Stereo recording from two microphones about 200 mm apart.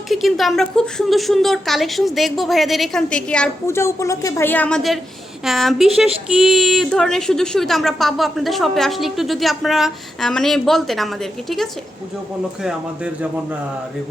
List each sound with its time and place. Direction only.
0.1 s a woman's voice: centre (ahead or behind)